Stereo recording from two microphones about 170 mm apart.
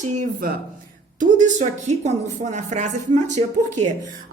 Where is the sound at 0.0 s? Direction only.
50° right (ahead or behind).